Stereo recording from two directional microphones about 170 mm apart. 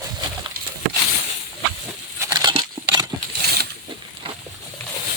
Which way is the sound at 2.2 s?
25° right (ahead or behind).